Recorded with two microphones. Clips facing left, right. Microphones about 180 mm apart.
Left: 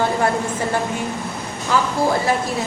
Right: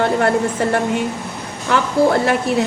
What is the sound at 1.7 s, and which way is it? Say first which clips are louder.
Speech: right 4 dB; 65° right (ahead or behind).